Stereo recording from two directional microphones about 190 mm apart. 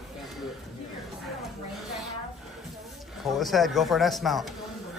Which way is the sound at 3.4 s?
Centre (ahead or behind).